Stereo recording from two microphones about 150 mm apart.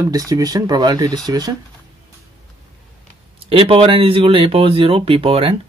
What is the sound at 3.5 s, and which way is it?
Speech, 40° right (ahead or behind).